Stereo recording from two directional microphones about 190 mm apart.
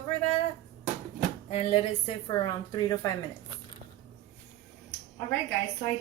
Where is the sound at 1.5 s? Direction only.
30° left (ahead or behind).